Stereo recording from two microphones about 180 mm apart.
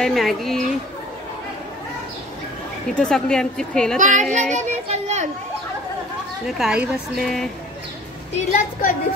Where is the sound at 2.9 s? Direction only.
5° left (ahead or behind).